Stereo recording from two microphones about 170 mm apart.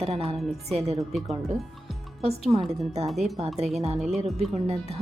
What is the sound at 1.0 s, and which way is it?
Speech, centre (ahead or behind).